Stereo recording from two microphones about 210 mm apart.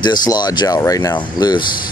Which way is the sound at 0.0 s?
20° left (ahead or behind).